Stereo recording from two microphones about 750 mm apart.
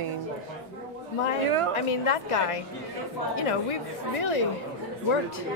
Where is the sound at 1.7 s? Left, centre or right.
Left.